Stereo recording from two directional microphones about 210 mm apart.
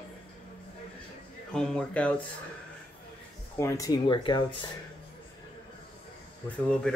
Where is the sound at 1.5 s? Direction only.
5° left (ahead or behind).